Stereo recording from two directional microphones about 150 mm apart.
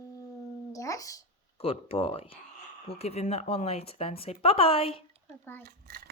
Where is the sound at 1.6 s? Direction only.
40° left (ahead or behind).